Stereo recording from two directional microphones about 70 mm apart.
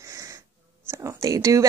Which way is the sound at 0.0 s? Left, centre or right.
Right.